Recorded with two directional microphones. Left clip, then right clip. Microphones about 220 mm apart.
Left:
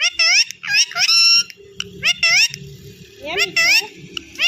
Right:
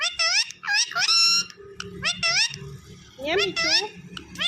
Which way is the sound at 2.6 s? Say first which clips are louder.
Left 4 dB; centre (ahead or behind).